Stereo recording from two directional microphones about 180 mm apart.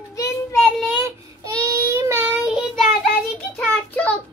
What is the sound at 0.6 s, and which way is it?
Child singing, 5° left (ahead or behind).